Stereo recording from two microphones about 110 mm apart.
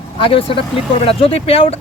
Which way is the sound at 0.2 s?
55° left (ahead or behind).